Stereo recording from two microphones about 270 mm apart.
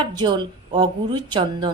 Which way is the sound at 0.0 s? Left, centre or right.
Centre.